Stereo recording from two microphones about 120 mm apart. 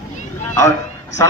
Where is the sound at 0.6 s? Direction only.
25° left (ahead or behind).